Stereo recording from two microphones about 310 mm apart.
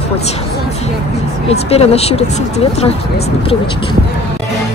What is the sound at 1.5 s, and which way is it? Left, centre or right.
Speech, centre.